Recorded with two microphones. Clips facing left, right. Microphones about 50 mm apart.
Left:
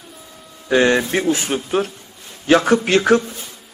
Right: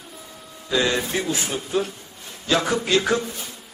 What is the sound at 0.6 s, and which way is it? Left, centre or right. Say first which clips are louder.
A man's voice: left 7 dB; left.